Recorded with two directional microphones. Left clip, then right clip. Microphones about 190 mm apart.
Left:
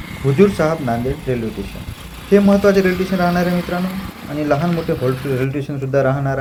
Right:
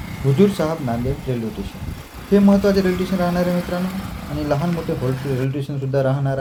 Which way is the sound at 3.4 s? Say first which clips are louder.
Left 2 dB; 60° right (ahead or behind).